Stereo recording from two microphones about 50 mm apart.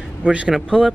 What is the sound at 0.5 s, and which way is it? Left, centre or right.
Speech, centre.